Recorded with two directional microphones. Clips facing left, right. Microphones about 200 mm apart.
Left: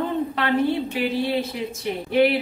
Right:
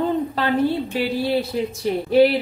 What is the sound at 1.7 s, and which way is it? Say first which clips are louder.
Speech: right 5 dB; 35° right (ahead or behind).